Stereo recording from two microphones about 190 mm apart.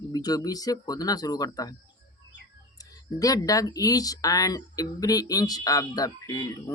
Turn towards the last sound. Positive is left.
turn(degrees=20)  # may be behind; listen again after turning